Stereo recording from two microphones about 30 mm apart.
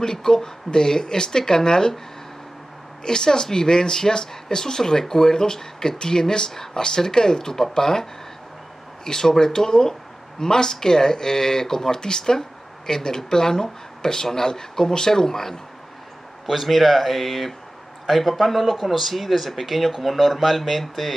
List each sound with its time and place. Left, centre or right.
0.0 s speech: centre
3.0 s speech: left
16.6 s speech: centre